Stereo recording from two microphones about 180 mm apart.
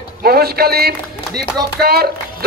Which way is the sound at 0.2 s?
60° right (ahead or behind).